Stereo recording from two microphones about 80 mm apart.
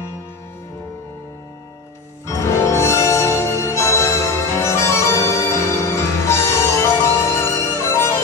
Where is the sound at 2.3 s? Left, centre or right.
Left.